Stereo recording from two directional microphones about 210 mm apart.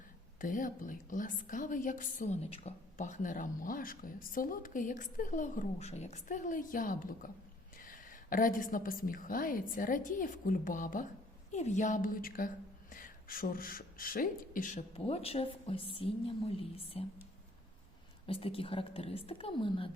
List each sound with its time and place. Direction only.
0.3 s a woman's voice: 40° left (ahead or behind)
18.3 s a woman's voice: 25° left (ahead or behind)